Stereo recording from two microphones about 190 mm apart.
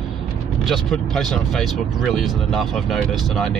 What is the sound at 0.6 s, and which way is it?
Speech, centre (ahead or behind).